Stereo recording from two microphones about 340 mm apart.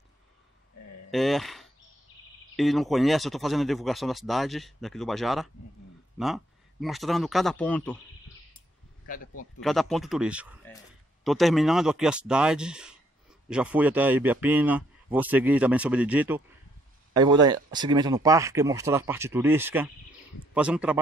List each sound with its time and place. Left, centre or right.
1.1 s speech: centre
9.0 s speech: left
9.6 s speech: centre